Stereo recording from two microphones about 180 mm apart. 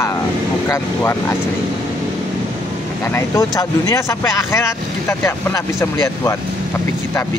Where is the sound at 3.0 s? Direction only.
15° left (ahead or behind).